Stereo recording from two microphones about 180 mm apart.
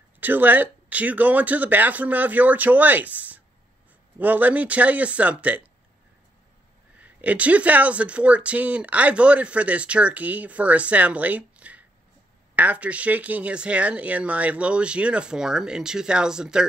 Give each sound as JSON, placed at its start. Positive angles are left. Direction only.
{"t": 0.2, "sound": "speech", "side_deg": -10}
{"t": 7.0, "sound": "speech", "side_deg": -5}